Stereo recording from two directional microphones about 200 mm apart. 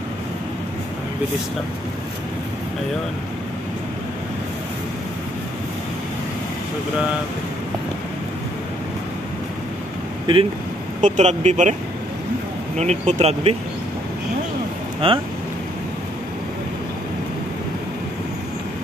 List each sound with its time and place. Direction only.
10.3 s speech: 25° right (ahead or behind)
11.0 s speech: 35° right (ahead or behind)
12.7 s speech: 35° right (ahead or behind)
15.0 s speech: 30° right (ahead or behind)